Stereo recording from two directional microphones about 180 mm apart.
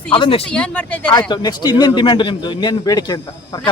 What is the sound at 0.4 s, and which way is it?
Speech, 5° left (ahead or behind).